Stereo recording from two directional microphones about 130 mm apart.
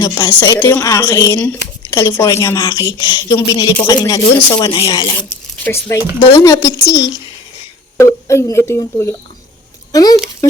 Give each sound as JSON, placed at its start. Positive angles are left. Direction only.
{"t": 0.0, "sound": "speech", "side_deg": 35}
{"t": 0.4, "sound": "a woman's voice", "side_deg": 20}
{"t": 5.6, "sound": "a woman's voice", "side_deg": 20}